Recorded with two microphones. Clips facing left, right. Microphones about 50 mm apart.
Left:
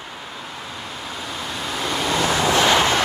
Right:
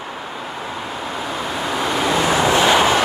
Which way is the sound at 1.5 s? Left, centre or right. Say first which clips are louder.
Right 4 dB; centre.